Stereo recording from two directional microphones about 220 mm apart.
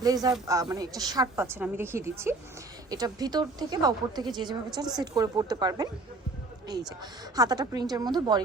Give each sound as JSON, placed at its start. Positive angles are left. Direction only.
{"t": 0.0, "sound": "a woman's voice", "side_deg": -15}